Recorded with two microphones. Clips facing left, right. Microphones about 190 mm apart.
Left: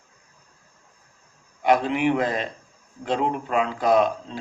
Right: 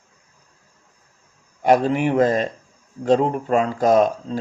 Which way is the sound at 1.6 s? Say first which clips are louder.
Right 4 dB; 40° right (ahead or behind).